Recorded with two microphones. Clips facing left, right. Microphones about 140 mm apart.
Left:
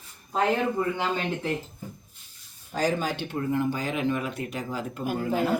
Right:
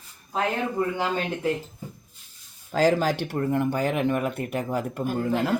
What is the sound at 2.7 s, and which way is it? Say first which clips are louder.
Speech: right 5 dB; 90° right.